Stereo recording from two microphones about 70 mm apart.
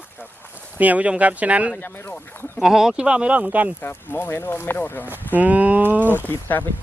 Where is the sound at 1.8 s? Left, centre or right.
Left.